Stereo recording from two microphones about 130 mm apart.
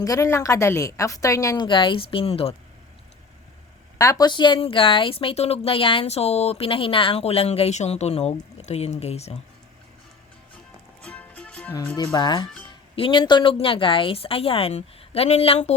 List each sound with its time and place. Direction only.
0.0 s a woman's voice: 25° left (ahead or behind)
1.6 s speech: 40° left (ahead or behind)
3.9 s speech: 25° left (ahead or behind); by 9.4 s 55° left (ahead or behind)
11.0 s music: 10° left (ahead or behind)
12.1 s speech: 35° left (ahead or behind); by 15.7 s 55° left (ahead or behind)